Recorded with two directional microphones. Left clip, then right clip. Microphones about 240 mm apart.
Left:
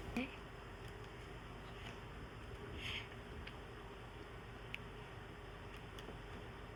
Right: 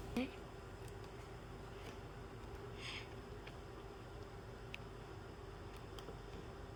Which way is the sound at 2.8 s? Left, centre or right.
Right.